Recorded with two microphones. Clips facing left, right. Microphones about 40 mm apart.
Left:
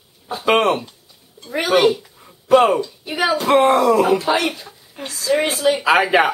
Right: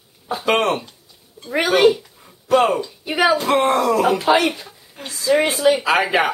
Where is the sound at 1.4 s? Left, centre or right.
Centre.